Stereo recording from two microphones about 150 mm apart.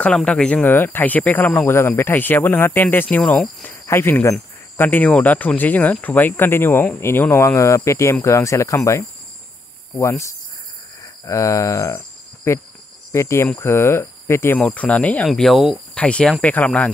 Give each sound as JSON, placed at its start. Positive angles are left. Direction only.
{"t": 0.0, "sound": "speech", "side_deg": 5}